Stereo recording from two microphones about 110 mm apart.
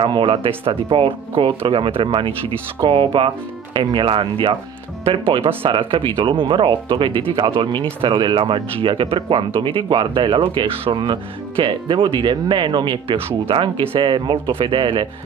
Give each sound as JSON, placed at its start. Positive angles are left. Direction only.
{"t": 0.0, "sound": "speech", "side_deg": -50}